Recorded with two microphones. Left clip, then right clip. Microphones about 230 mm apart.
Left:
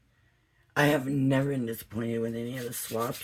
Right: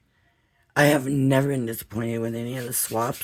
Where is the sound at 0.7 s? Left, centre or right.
Right.